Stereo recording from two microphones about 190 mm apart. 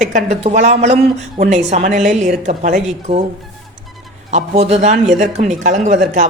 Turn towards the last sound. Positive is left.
turn(degrees=-40)  # may be behind; listen again after turning